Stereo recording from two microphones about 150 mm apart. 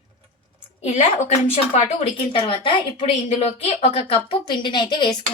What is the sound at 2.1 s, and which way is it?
Speech, 35° left (ahead or behind).